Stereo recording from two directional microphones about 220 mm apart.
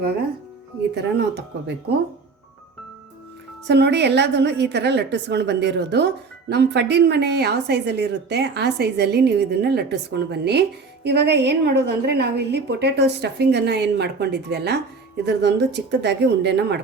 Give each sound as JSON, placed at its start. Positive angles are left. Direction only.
{"t": 0.9, "sound": "a woman's voice", "side_deg": -50}
{"t": 3.7, "sound": "a woman's voice", "side_deg": -50}